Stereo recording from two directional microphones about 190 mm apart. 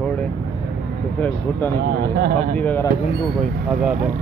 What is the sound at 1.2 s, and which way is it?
Speech, 10° left (ahead or behind).